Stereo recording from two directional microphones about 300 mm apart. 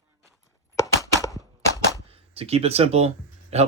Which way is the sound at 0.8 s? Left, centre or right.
Centre.